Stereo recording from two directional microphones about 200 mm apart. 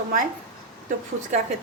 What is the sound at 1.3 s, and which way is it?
Speech, 35° right (ahead or behind).